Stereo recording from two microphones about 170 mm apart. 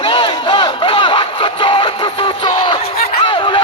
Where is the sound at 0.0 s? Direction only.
30° left (ahead or behind).